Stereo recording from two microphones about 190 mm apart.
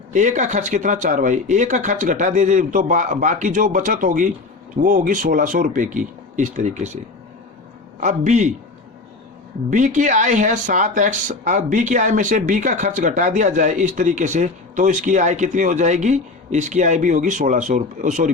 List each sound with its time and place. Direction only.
0.1 s speech: 40° right (ahead or behind)
8.0 s speech: 40° right (ahead or behind)
9.6 s speech: 40° right (ahead or behind)